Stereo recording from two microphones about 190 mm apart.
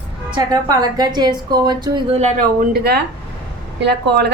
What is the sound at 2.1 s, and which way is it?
Speech, 35° right (ahead or behind).